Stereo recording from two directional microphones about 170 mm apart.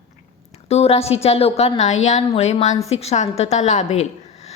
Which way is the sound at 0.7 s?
40° left (ahead or behind).